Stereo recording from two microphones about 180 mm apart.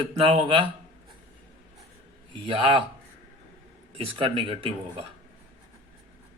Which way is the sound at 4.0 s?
30° right (ahead or behind).